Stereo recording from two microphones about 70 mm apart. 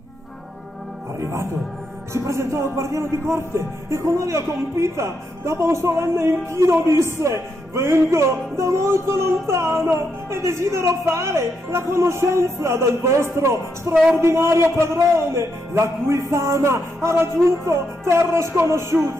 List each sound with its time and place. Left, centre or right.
1.2 s speech: right